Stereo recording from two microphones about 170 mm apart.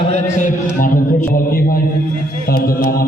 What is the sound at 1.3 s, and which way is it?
Mantra, 60° left (ahead or behind).